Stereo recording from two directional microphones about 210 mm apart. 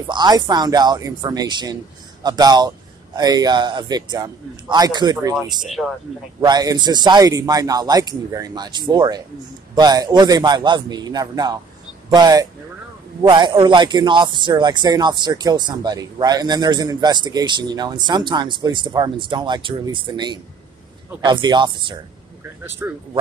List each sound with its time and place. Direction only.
0.0 s speech: 20° right (ahead or behind)
5.7 s speech: centre (ahead or behind)
6.4 s speech: 20° right (ahead or behind)
22.8 s speech: 10° right (ahead or behind)